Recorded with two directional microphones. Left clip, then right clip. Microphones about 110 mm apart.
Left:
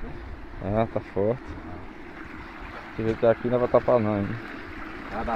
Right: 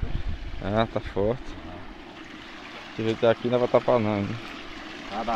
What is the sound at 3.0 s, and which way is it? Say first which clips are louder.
Speech: even; 20° right (ahead or behind).